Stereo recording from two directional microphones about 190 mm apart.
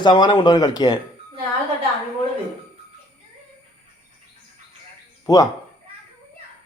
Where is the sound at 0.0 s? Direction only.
20° left (ahead or behind).